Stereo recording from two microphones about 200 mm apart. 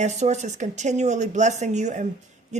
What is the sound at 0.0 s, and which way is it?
A woman's voice, 35° right (ahead or behind).